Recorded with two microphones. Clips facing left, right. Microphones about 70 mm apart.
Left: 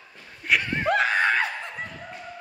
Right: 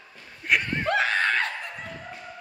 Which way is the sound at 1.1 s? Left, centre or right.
Centre.